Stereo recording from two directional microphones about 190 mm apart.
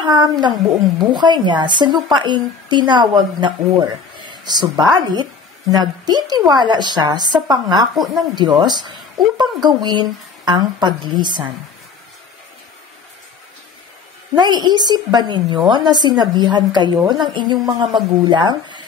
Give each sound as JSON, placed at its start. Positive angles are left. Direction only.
{"t": 0.0, "sound": "speech", "side_deg": -20}
{"t": 4.2, "sound": "a sound", "side_deg": -25}
{"t": 4.9, "sound": "speech", "side_deg": -20}
{"t": 14.3, "sound": "speech", "side_deg": -20}